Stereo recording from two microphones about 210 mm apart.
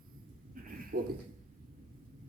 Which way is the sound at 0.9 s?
50° right (ahead or behind).